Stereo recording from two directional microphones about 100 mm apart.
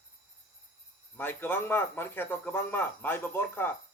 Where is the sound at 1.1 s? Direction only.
20° left (ahead or behind).